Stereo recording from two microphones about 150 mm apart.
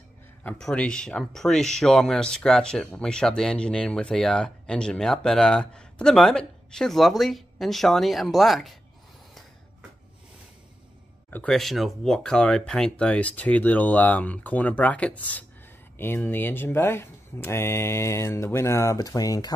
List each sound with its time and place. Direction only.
0.4 s speech: 10° left (ahead or behind)
11.2 s speech: 10° left (ahead or behind); by 19.5 s 25° left (ahead or behind)